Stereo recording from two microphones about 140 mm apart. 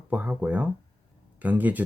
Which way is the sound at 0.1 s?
10° right (ahead or behind).